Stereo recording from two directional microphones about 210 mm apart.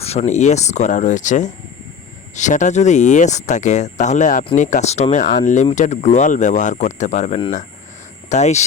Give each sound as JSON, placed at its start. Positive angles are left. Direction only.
{"t": 0.0, "sound": "speech", "side_deg": 30}